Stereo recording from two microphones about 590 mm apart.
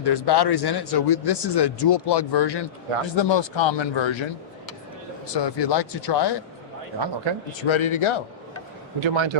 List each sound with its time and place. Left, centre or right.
0.0 s a man's voice: left
5.3 s speech: left
7.6 s a man's voice: left
9.0 s a man's voice: right